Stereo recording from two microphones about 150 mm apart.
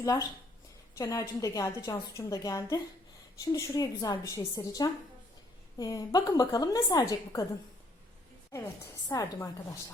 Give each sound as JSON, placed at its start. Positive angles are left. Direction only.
{"t": 0.0, "sound": "a woman's voice", "side_deg": 20}
{"t": 8.5, "sound": "a woman's voice", "side_deg": 20}